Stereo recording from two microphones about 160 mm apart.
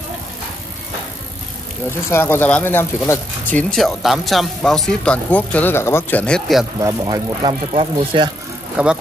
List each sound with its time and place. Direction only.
1.9 s speech: 15° left (ahead or behind)
3.7 s speech: centre (ahead or behind)
6.8 s speech: 20° right (ahead or behind)
7.7 s speech: 35° right (ahead or behind)
8.7 s speech: 5° right (ahead or behind)